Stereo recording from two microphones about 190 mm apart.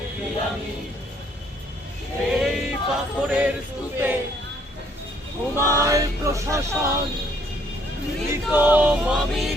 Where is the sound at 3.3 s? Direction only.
5° right (ahead or behind).